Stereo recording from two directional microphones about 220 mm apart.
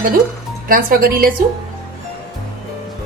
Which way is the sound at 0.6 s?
40° right (ahead or behind).